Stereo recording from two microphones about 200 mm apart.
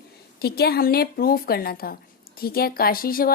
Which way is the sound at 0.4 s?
50° left (ahead or behind).